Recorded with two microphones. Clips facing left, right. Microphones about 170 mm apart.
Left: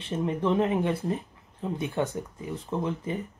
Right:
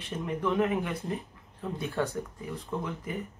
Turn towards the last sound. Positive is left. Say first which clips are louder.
# left 4 dB
turn(degrees=25)  # may be behind; listen again after turning